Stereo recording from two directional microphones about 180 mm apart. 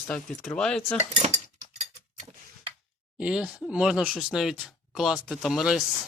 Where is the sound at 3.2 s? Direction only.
5° right (ahead or behind).